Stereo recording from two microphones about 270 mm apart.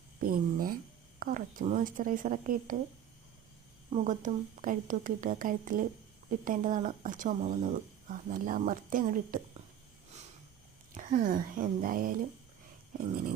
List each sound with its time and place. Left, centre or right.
0.2 s speech: right
3.8 s speech: right
10.9 s speech: right